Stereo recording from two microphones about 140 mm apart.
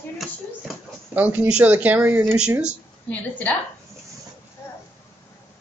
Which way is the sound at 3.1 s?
10° left (ahead or behind).